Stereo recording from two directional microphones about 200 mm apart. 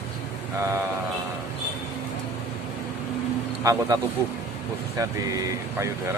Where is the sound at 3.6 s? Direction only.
15° right (ahead or behind).